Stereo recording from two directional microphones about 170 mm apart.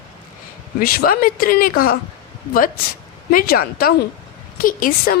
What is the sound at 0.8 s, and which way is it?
Speech, 60° left (ahead or behind).